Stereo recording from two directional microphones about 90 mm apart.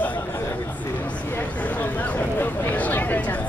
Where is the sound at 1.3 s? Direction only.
15° left (ahead or behind).